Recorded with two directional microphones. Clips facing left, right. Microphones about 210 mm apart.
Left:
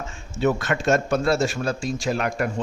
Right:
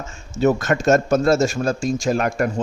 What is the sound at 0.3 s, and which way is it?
A man's voice, 40° right (ahead or behind).